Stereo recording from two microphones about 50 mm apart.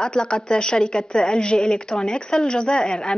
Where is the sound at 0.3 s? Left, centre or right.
Centre.